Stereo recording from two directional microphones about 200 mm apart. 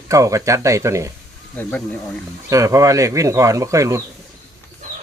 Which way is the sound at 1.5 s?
10° left (ahead or behind).